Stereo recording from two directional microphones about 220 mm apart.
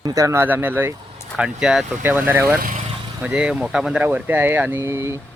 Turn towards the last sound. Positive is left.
turn(degrees=-10)  # may be behind; listen again after turning